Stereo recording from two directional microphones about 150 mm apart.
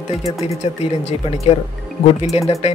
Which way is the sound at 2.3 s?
45° left (ahead or behind).